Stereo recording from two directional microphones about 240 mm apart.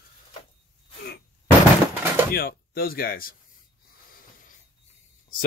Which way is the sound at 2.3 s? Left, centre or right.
Left.